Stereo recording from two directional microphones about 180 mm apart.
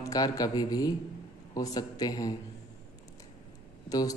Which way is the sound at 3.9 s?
20° left (ahead or behind).